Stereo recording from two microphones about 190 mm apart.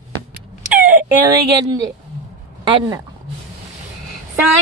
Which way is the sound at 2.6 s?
25° right (ahead or behind).